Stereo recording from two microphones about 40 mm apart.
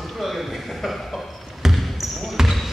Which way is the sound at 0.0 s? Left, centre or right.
Centre.